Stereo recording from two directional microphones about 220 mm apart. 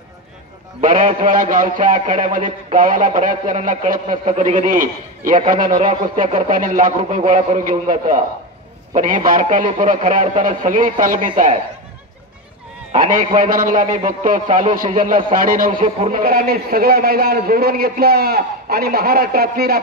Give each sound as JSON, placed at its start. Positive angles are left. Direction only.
{"t": 0.7, "sound": "a man's voice", "side_deg": -35}
{"t": 12.9, "sound": "a man's voice", "side_deg": -35}
{"t": 15.3, "sound": "a man's voice", "side_deg": -40}